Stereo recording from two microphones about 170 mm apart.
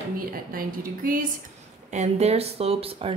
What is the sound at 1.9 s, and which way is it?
Speech, 40° right (ahead or behind).